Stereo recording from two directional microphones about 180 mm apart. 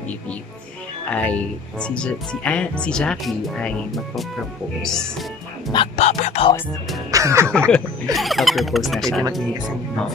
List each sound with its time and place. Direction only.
1.0 s speech: 10° left (ahead or behind)
5.7 s speech: 30° left (ahead or behind)
7.1 s music: 15° right (ahead or behind)
7.5 s speech: 5° left (ahead or behind)